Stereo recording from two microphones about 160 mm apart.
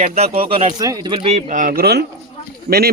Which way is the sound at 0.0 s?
55° right (ahead or behind).